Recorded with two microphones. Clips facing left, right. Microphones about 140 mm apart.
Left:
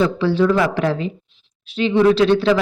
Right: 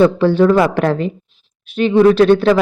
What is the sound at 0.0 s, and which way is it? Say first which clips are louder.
Speech: right 5 dB; 55° right (ahead or behind).